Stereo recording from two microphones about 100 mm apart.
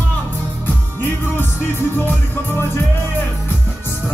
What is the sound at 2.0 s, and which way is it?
Music, 20° left (ahead or behind).